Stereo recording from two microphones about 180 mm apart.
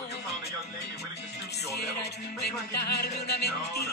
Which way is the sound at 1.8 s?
65° left (ahead or behind).